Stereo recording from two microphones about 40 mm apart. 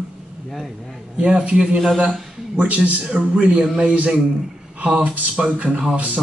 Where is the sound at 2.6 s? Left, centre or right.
Right.